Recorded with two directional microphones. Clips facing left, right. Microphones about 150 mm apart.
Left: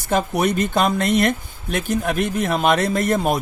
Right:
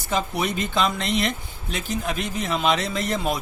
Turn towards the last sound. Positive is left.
turn(degrees=50)  # may be behind; listen again after turning